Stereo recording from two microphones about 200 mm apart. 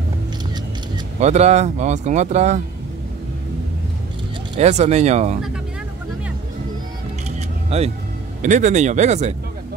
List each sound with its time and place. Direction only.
1.2 s speech: 35° right (ahead or behind)
4.6 s speech: 35° right (ahead or behind)
7.2 s single-lens reflex camera: 30° right (ahead or behind)
8.4 s speech: 40° right (ahead or behind)